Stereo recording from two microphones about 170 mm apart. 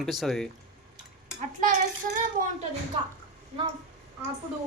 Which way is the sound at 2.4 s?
55° right (ahead or behind).